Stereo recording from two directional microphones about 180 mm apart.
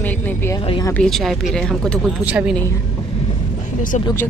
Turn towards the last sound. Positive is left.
turn(degrees=15)  # may be behind; listen again after turning